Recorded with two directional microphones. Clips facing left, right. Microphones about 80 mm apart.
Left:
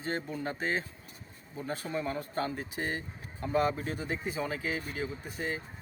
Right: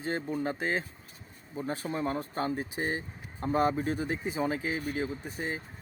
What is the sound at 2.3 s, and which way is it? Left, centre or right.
Speech, right.